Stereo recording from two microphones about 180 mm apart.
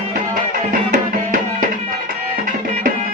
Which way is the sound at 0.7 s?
50° right (ahead or behind).